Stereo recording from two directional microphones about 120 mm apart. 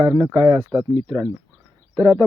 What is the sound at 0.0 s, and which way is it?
Speech, 25° right (ahead or behind).